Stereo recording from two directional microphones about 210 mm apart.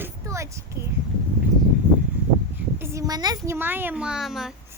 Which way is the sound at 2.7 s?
15° right (ahead or behind).